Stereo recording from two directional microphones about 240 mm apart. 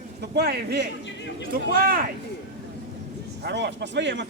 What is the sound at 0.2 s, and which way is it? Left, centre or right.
A man's voice, right.